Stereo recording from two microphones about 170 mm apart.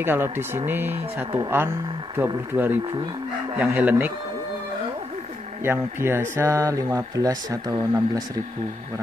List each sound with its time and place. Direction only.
0.0 s speech: 15° right (ahead or behind)
5.6 s speech: 15° right (ahead or behind)